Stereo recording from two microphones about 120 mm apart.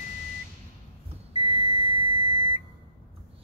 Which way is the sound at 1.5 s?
50° right (ahead or behind).